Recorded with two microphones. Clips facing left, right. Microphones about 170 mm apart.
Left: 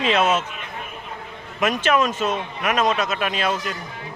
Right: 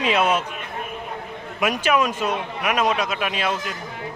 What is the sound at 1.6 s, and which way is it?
Speech, 10° right (ahead or behind).